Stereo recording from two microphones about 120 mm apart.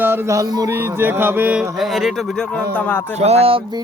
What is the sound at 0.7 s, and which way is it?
Mantra, 20° right (ahead or behind).